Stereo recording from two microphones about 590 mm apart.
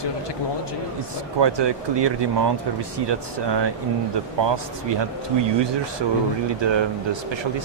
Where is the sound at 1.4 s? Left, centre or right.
Right.